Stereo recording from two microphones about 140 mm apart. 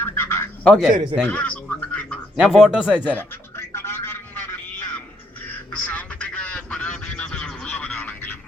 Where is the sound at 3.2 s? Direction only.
15° left (ahead or behind).